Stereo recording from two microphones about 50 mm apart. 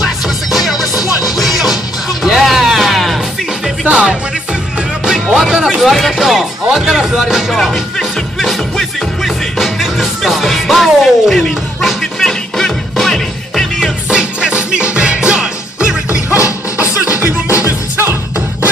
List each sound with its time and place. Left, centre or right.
0.0 s music: centre
3.8 s music: right
5.0 s music: centre
5.9 s speech: centre
12.2 s music: centre
14.1 s music: right
16.7 s music: right
17.6 s music: left